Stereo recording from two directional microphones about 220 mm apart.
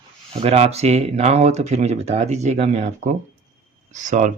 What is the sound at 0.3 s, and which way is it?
Speech, 30° right (ahead or behind).